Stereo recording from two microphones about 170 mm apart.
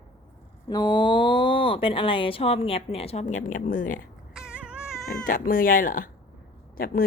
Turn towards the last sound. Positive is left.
turn(degrees=60)  # may be behind; listen again after turning